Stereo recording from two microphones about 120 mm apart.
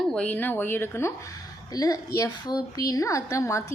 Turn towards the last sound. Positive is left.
turn(degrees=25)  # may be behind; listen again after turning